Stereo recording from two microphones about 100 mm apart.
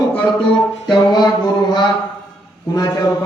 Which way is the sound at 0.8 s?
45° left (ahead or behind).